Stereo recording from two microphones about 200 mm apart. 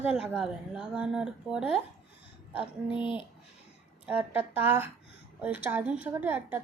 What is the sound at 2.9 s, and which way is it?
Speech, 25° left (ahead or behind).